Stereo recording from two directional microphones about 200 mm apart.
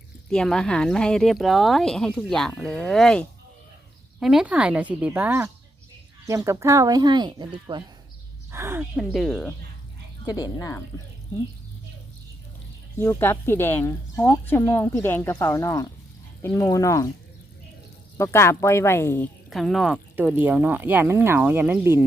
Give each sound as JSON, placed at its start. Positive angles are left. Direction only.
{"t": 0.3, "sound": "speech", "side_deg": 5}
{"t": 9.0, "sound": "speech", "side_deg": 0}
{"t": 10.2, "sound": "speech", "side_deg": 20}
{"t": 13.0, "sound": "speech", "side_deg": 10}
{"t": 18.2, "sound": "speech", "side_deg": 15}
{"t": 19.5, "sound": "speech", "side_deg": 0}